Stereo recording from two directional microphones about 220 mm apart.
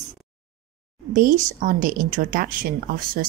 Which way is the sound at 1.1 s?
35° right (ahead or behind).